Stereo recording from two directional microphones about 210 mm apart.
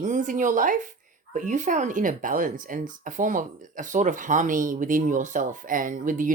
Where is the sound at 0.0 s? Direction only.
35° right (ahead or behind).